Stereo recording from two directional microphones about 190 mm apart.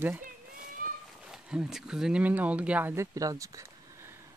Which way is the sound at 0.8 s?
45° right (ahead or behind).